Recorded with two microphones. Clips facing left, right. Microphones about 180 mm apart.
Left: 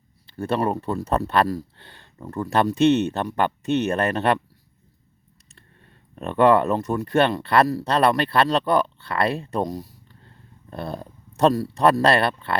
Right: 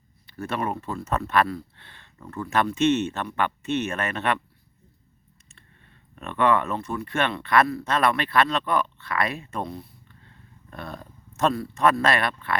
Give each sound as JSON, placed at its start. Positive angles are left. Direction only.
{"t": 0.3, "sound": "speech", "side_deg": 30}
{"t": 6.1, "sound": "speech", "side_deg": 35}